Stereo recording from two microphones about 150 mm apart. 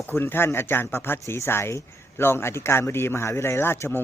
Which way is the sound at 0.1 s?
15° left (ahead or behind).